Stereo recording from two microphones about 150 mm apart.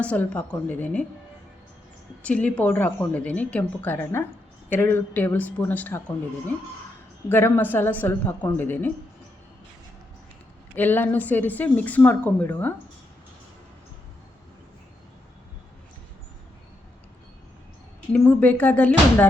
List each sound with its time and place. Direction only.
0.0 s a woman's voice: 10° left (ahead or behind)
2.2 s a woman's voice: 10° left (ahead or behind)
7.3 s a woman's voice: 15° left (ahead or behind)
10.8 s a woman's voice: 10° left (ahead or behind)
18.1 s a woman's voice: 10° left (ahead or behind)